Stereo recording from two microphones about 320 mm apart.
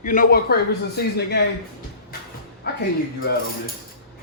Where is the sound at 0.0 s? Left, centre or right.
Left.